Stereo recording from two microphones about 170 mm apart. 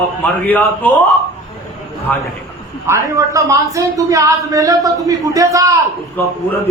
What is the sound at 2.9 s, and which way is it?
A woman's voice, 20° right (ahead or behind).